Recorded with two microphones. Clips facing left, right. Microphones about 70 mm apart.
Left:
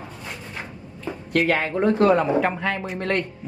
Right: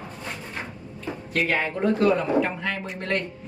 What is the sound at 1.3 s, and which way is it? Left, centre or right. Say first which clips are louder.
Speech: left 5 dB; left.